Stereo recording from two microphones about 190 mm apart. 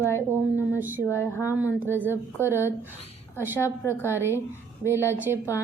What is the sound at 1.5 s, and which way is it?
Speech, 10° right (ahead or behind).